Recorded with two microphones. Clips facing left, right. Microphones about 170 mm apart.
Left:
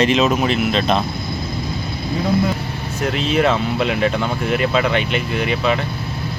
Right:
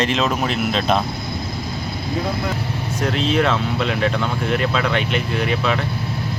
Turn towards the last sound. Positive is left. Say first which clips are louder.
# left 2 dB
turn(degrees=5)  # may be behind; listen again after turning